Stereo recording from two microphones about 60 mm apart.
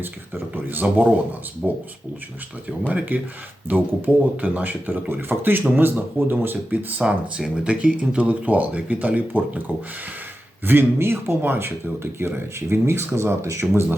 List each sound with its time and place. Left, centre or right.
0.0 s speech: right
1.6 s speech: centre
3.1 s speech: right
7.0 s speech: centre; by 9.7 s right
10.7 s speech: right